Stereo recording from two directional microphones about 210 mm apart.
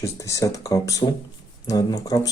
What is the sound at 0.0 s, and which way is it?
Speech, 15° left (ahead or behind).